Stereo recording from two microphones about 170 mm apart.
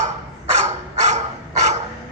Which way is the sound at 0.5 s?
40° right (ahead or behind).